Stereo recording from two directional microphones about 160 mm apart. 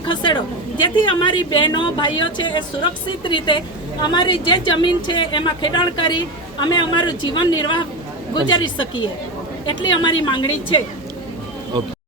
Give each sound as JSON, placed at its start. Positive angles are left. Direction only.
{"t": 0.1, "sound": "a sound", "side_deg": 30}
{"t": 0.8, "sound": "a woman's voice", "side_deg": 30}
{"t": 9.6, "sound": "a woman's voice", "side_deg": 30}